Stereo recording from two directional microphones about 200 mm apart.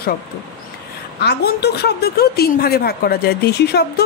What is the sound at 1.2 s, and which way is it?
A woman's voice, 55° left (ahead or behind).